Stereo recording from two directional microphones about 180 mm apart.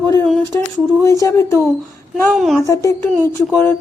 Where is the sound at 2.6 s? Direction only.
15° left (ahead or behind).